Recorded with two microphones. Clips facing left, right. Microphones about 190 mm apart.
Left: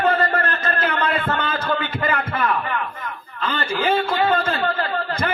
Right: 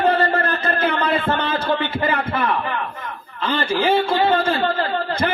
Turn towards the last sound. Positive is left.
turn(degrees=-30)  # may be behind; listen again after turning